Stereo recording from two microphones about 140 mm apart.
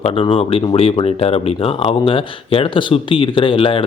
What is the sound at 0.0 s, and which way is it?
Speech, 40° left (ahead or behind).